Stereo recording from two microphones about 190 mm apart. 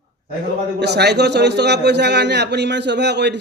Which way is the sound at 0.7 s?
60° right (ahead or behind).